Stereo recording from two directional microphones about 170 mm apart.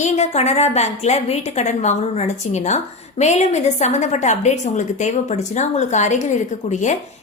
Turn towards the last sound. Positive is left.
turn(degrees=45)  # may be behind; listen again after turning